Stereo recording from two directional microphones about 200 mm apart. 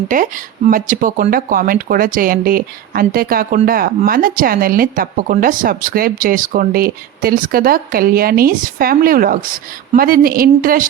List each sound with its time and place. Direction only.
0.1 s speech: 40° right (ahead or behind)